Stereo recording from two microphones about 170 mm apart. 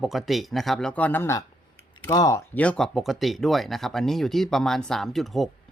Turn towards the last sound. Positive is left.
turn(degrees=0)  # may be behind; listen again after turning